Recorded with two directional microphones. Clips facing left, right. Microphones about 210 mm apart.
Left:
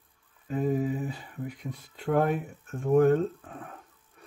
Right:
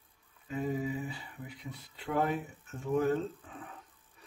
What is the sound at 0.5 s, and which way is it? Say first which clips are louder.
Speech: left 6 dB; 45° left (ahead or behind).